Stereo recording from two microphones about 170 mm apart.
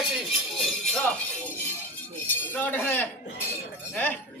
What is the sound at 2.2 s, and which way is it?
Speech, 10° left (ahead or behind).